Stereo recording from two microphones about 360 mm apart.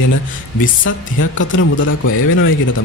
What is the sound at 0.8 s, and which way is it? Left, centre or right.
Speech, left.